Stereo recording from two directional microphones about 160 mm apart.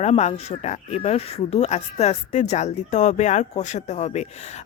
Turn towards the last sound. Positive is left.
turn(degrees=45)  # may be behind; listen again after turning